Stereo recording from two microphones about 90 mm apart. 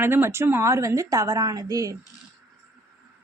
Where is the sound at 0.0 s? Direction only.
25° right (ahead or behind); by 2.0 s 40° right (ahead or behind).